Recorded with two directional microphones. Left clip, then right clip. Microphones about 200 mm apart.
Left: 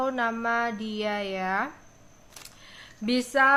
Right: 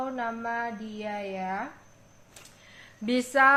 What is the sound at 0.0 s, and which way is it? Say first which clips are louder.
A woman's voice: left 5 dB; 25° left (ahead or behind).